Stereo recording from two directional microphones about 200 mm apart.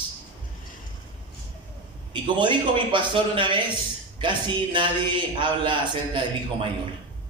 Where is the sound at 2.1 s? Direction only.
25° right (ahead or behind).